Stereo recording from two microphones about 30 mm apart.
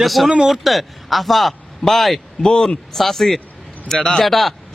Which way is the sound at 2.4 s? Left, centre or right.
Centre.